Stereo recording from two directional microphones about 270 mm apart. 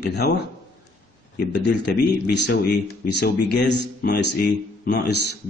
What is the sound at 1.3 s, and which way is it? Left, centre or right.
Speech, left.